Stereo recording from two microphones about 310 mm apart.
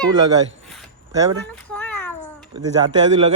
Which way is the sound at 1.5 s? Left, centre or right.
Centre.